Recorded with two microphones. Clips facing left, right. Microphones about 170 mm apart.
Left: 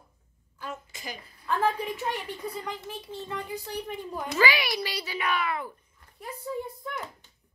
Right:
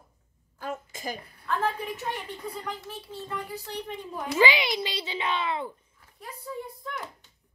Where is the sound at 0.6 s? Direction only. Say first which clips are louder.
Right 4 dB; 45° right (ahead or behind).